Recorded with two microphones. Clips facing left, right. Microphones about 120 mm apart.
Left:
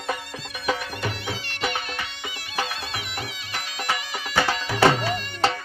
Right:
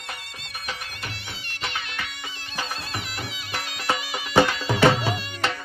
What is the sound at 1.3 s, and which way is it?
Music, 70° left (ahead or behind).